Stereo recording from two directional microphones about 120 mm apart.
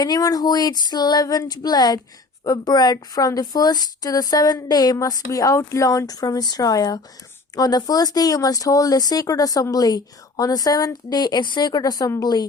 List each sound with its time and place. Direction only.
0.0 s speech: 35° left (ahead or behind)